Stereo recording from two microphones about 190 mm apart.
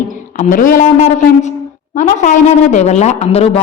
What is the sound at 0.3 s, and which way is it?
A woman's voice, 45° left (ahead or behind).